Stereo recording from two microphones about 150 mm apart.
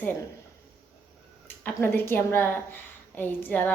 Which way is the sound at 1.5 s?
15° left (ahead or behind).